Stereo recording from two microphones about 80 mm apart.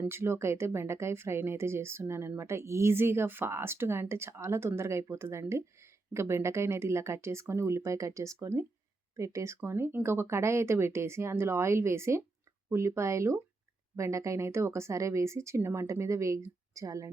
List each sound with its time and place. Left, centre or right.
0.1 s speech: right